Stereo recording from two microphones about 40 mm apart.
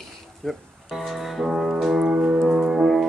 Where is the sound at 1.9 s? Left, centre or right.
Centre.